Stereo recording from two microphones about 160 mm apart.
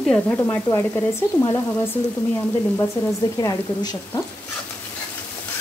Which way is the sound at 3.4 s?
20° left (ahead or behind).